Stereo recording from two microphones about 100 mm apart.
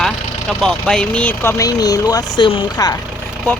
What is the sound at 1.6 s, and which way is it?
Speech, 40° left (ahead or behind).